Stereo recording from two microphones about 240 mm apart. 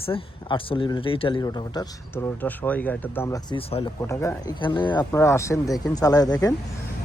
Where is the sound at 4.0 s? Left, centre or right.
Centre.